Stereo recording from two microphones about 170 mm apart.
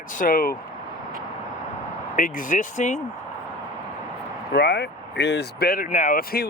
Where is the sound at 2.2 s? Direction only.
55° left (ahead or behind).